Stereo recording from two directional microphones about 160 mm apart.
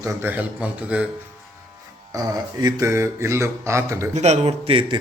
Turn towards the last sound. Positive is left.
turn(degrees=-35)  # may be behind; listen again after turning